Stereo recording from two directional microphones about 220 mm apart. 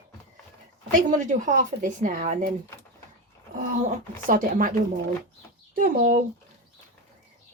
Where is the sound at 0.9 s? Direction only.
35° right (ahead or behind).